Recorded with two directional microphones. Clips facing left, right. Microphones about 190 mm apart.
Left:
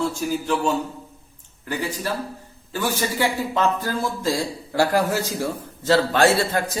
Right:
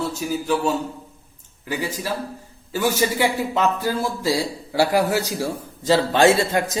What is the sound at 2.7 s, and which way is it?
A man's voice, 15° right (ahead or behind).